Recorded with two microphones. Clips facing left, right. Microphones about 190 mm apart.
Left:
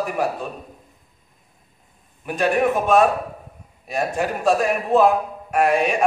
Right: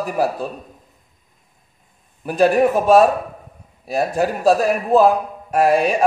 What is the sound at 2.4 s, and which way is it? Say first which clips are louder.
A man's voice: right 5 dB; 35° right (ahead or behind).